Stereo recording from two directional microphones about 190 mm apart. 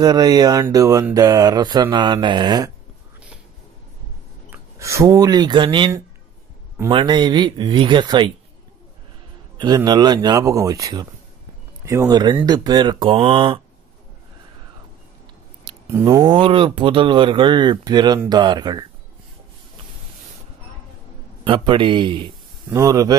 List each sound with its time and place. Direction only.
0.0 s speech: 20° right (ahead or behind)
4.5 s speech: 15° right (ahead or behind)
9.8 s speech: 20° right (ahead or behind)
15.9 s speech: 15° right (ahead or behind)
16.3 s speech: 25° right (ahead or behind)
21.5 s speech: 25° right (ahead or behind)